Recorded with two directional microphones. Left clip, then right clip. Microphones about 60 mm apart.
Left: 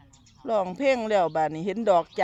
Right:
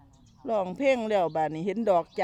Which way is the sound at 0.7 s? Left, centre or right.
Centre.